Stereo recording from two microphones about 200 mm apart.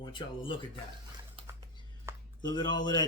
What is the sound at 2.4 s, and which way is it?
Speech, 20° left (ahead or behind).